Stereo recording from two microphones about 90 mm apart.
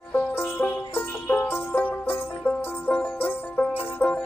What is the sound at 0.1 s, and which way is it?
Music, 25° left (ahead or behind).